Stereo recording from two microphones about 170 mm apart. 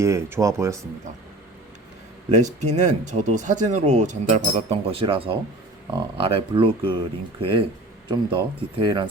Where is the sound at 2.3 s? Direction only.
45° right (ahead or behind).